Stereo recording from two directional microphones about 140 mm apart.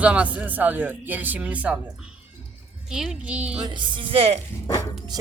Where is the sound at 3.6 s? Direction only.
35° right (ahead or behind).